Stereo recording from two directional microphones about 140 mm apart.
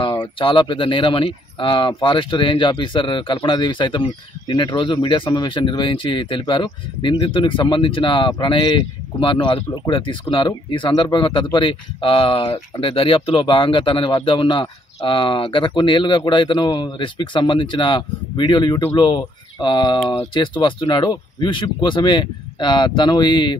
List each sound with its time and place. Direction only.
0.0 s speech: 35° left (ahead or behind)